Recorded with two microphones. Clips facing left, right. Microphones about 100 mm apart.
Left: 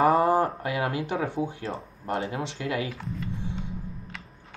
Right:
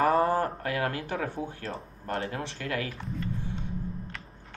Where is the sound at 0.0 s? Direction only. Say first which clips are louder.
Left 3 dB; 15° left (ahead or behind).